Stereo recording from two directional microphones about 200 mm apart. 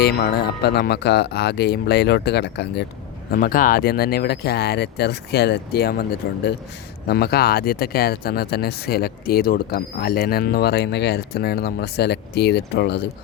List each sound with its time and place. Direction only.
0.0 s speech: 55° left (ahead or behind)
3.3 s speech: 45° left (ahead or behind)